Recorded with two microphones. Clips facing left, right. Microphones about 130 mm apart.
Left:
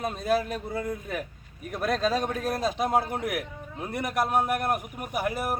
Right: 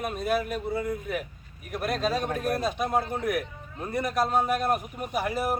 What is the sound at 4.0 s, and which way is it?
A man's voice, 10° left (ahead or behind).